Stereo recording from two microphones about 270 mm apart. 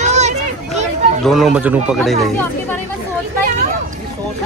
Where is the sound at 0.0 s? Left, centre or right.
Right.